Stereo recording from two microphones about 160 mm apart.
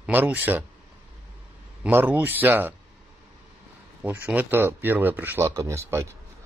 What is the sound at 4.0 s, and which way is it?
Speech, 10° right (ahead or behind).